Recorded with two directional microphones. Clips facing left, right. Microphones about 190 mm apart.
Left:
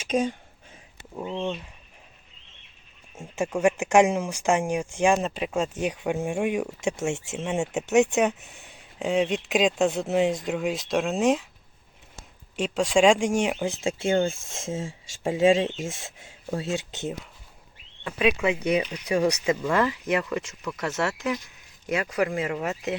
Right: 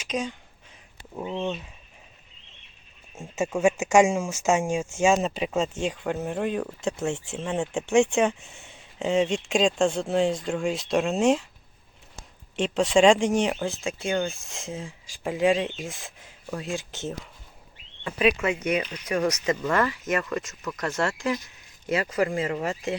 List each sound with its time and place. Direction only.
1.1 s speech: 5° right (ahead or behind)
3.3 s speech: 5° right (ahead or behind)
12.5 s speech: centre (ahead or behind)
13.8 s speech: 25° left (ahead or behind)
18.0 s speech: 5° left (ahead or behind)